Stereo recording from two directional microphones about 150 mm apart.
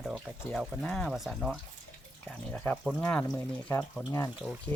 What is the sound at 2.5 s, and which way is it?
Speech, 10° left (ahead or behind).